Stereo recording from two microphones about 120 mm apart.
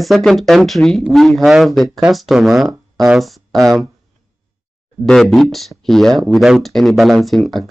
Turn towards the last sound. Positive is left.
turn(degrees=0)  # may be behind; listen again after turning